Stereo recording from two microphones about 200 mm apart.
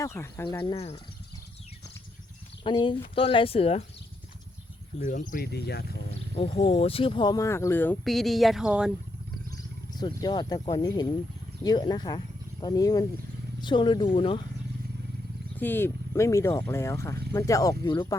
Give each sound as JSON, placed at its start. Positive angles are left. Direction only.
{"t": 0.0, "sound": "speech", "side_deg": 15}
{"t": 0.6, "sound": "a woman's voice", "side_deg": 25}
{"t": 2.6, "sound": "a woman's voice", "side_deg": 25}
{"t": 4.9, "sound": "speech", "side_deg": 40}
{"t": 6.3, "sound": "speech", "side_deg": 25}
{"t": 9.9, "sound": "a woman's voice", "side_deg": 20}
{"t": 15.5, "sound": "speech", "side_deg": 10}